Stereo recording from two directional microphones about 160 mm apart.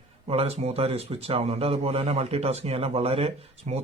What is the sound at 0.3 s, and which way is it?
Speech, 40° right (ahead or behind).